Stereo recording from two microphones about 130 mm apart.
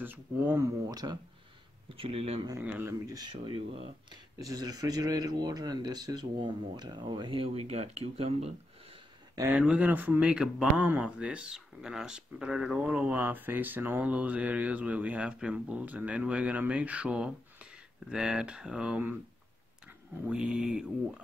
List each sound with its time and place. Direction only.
0.0 s speech: 15° right (ahead or behind)
1.9 s speech: 45° right (ahead or behind)
2.6 s speech: 10° right (ahead or behind)
2.9 s speech: 30° right (ahead or behind); by 4.2 s 45° right (ahead or behind)
4.4 s speech: 30° right (ahead or behind); by 8.5 s 55° right (ahead or behind)
9.5 s speech: 5° right (ahead or behind)
20.2 s speech: 5° right (ahead or behind)